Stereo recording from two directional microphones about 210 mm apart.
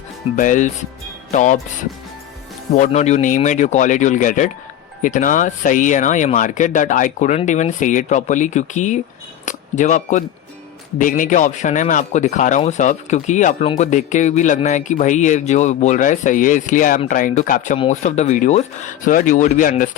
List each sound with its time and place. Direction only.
0.3 s speech: 40° left (ahead or behind)
2.7 s speech: 35° left (ahead or behind)